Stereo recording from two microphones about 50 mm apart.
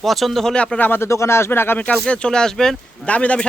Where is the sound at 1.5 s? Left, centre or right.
Left.